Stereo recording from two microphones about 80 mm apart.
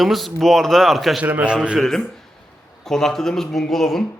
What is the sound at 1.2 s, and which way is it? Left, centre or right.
Speech, centre.